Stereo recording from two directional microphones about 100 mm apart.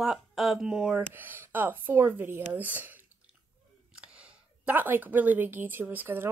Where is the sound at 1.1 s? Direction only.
20° right (ahead or behind).